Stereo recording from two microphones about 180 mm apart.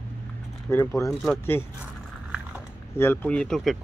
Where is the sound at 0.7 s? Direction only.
15° left (ahead or behind).